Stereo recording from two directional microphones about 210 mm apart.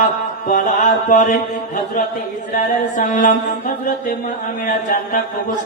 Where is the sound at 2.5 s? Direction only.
35° left (ahead or behind).